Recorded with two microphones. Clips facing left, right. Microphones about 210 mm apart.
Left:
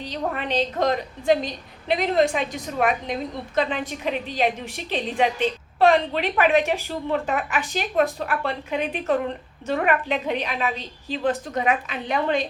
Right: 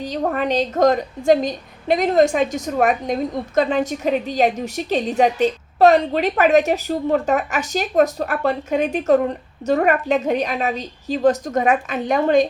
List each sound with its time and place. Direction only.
0.0 s a woman's voice: 45° right (ahead or behind)